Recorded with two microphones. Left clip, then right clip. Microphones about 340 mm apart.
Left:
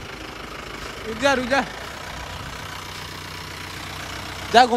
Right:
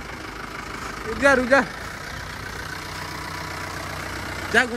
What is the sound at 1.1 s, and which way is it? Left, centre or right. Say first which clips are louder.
Speech: right 3 dB; centre.